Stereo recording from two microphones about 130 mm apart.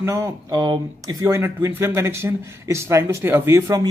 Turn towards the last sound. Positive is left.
turn(degrees=-30)  # may be behind; listen again after turning